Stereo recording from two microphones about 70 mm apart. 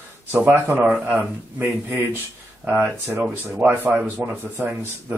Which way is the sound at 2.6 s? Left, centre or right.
Centre.